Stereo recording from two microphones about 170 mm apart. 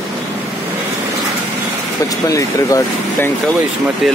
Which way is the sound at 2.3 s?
20° left (ahead or behind).